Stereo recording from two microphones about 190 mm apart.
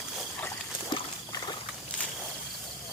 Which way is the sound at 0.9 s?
25° left (ahead or behind).